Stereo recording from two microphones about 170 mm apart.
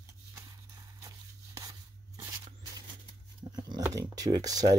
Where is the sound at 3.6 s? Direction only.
25° right (ahead or behind).